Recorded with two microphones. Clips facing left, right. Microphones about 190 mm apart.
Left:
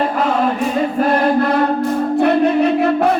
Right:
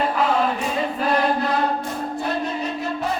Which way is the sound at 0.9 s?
55° left (ahead or behind).